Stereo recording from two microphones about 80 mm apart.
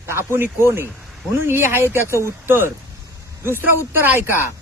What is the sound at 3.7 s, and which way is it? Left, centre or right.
Speech, right.